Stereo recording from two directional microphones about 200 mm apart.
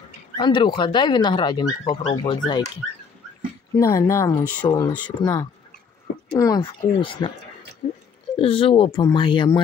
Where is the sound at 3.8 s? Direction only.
15° left (ahead or behind).